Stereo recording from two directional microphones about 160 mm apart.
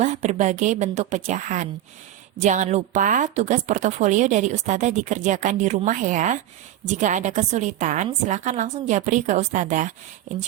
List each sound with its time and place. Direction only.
0.0 s a woman's voice: 50° right (ahead or behind)